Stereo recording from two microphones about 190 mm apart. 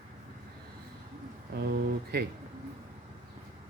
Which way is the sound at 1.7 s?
55° right (ahead or behind).